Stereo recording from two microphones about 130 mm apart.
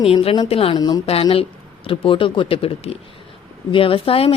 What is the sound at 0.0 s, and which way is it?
Speech, 45° left (ahead or behind).